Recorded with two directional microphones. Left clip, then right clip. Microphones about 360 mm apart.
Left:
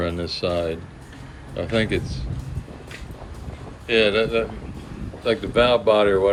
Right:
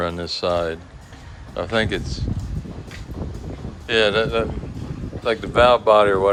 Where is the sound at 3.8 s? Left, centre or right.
Centre.